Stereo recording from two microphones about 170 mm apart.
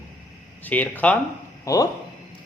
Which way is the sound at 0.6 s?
10° left (ahead or behind).